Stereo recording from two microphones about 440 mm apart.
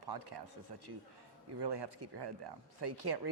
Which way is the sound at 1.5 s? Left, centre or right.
Right.